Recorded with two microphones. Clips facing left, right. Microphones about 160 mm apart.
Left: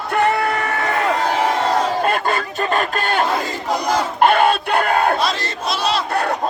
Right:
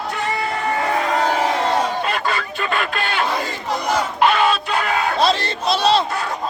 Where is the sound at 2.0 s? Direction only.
50° left (ahead or behind).